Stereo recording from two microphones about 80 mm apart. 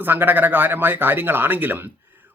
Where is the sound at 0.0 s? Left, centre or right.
Right.